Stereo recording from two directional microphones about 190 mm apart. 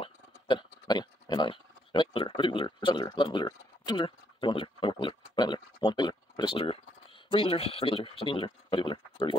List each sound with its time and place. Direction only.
0.0 s speech: 25° left (ahead or behind)